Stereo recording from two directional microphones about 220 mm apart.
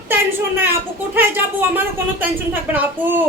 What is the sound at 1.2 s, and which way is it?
Speech, 10° right (ahead or behind).